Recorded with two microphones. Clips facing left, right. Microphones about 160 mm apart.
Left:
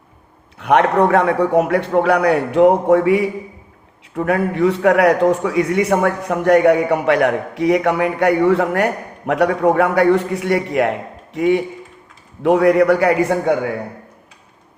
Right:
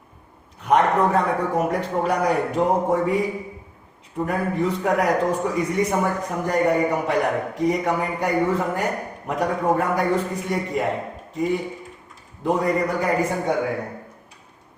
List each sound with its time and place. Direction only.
0.6 s a man's voice: 75° left (ahead or behind)